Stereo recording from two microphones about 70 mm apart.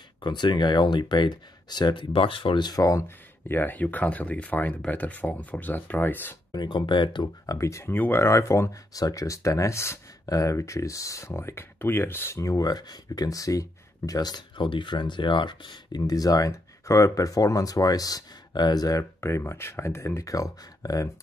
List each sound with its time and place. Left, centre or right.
0.2 s speech: left
2.8 s speech: left
3.4 s speech: left
6.5 s speech: left
7.5 s speech: left
7.9 s speech: left
8.3 s speech: left
8.9 s speech: left
10.2 s speech: left
12.4 s speech: left
12.6 s speech: left
14.9 s speech: left
19.2 s speech: left
20.2 s speech: left